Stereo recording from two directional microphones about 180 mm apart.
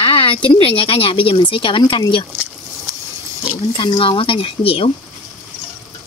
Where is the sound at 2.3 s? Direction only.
10° right (ahead or behind).